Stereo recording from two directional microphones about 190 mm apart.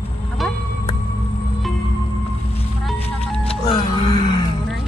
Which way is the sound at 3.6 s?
25° left (ahead or behind).